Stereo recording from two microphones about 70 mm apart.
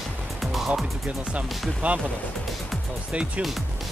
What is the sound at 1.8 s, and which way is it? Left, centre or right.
Speech, right.